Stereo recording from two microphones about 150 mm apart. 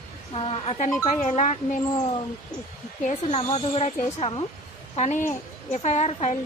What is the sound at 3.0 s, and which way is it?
A woman's voice, 45° left (ahead or behind).